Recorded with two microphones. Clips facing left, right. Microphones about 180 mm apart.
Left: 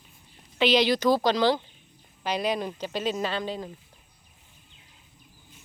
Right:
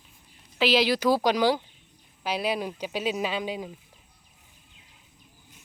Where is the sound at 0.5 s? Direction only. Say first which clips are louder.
Left 1 dB; 5° right (ahead or behind).